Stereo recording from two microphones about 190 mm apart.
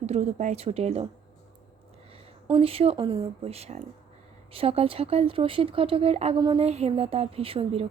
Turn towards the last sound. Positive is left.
turn(degrees=-30)  # may be behind; listen again after turning